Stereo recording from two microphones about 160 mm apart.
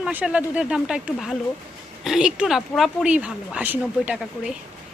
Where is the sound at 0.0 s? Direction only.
10° right (ahead or behind).